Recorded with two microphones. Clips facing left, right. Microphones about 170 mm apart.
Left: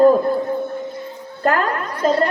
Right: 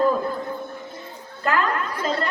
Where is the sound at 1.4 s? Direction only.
45° left (ahead or behind).